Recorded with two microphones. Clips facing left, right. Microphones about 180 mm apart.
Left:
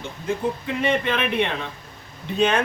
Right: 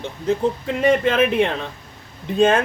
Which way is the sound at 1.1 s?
45° right (ahead or behind).